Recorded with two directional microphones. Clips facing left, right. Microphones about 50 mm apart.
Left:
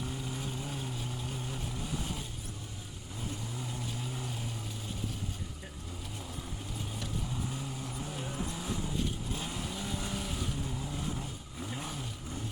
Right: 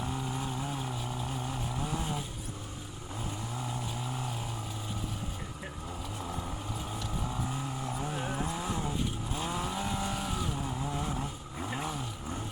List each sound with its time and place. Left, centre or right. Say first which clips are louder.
0.0 s vehicle: right 4 dB; right
7.9 s vehicle: right 5 dB; right
10.0 s vehicle: right 4 dB; centre
10.9 s vehicle: right 3 dB; right